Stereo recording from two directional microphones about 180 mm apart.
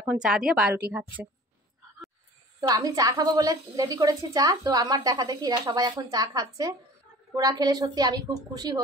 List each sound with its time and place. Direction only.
0.0 s a woman's voice: 5° right (ahead or behind)
2.6 s a woman's voice: 20° right (ahead or behind)